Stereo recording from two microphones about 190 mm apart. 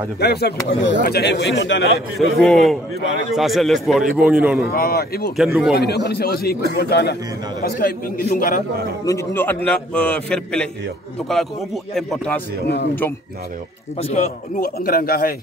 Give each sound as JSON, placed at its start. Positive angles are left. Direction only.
{"t": 0.2, "sound": "speech", "side_deg": 60}
{"t": 2.1, "sound": "a man's voice", "side_deg": 0}
{"t": 4.7, "sound": "speech", "side_deg": 50}
{"t": 5.4, "sound": "a man's voice", "side_deg": 0}
{"t": 5.8, "sound": "speech", "side_deg": 60}
{"t": 9.0, "sound": "a man's voice", "side_deg": 15}
{"t": 13.9, "sound": "speech", "side_deg": 35}